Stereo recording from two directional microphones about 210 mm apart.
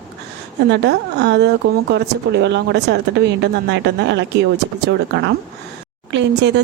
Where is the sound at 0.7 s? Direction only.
55° right (ahead or behind).